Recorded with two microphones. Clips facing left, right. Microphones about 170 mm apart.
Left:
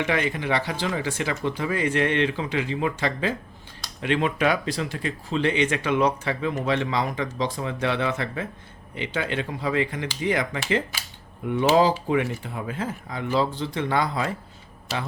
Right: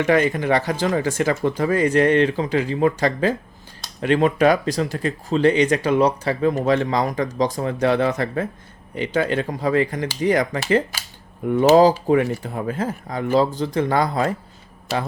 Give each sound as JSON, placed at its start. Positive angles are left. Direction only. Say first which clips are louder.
{"t": 0.0, "sound": "speech", "louder": "right 7 dB", "side_deg": -45}